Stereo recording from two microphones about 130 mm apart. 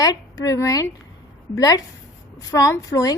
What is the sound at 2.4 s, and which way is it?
Speech, 25° left (ahead or behind).